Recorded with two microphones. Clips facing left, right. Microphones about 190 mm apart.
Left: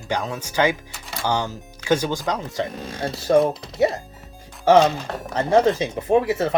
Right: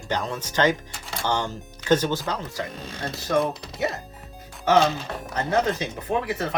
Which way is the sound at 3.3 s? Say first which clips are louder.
Left 6 dB; 35° left (ahead or behind).